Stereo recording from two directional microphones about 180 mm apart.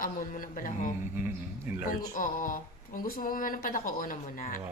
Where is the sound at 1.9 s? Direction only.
45° left (ahead or behind).